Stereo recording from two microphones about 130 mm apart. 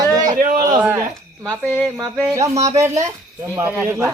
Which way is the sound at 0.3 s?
90° right.